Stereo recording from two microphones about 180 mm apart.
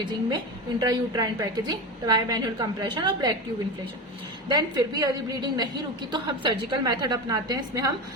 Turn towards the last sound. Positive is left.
turn(degrees=-20)  # may be behind; listen again after turning